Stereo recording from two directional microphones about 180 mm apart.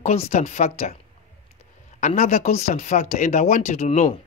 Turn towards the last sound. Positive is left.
turn(degrees=40)  # may be behind; listen again after turning